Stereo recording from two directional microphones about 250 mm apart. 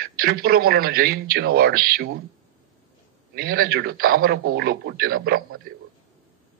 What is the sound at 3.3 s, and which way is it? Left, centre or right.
A man's voice, right.